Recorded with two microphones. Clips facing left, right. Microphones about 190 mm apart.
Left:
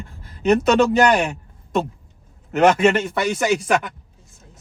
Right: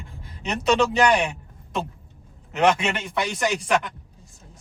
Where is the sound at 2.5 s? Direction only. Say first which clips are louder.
Left 6 dB; 45° left (ahead or behind).